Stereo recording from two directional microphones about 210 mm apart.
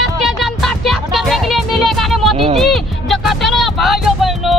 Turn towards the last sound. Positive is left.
turn(degrees=0)  # may be behind; listen again after turning